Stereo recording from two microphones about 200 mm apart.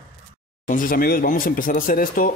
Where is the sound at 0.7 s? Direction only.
45° left (ahead or behind).